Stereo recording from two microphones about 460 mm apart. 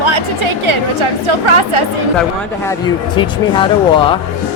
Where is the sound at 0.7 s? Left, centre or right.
Right.